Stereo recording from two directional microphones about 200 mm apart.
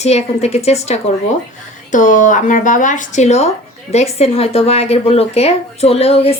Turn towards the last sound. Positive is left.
turn(degrees=30)  # may be behind; listen again after turning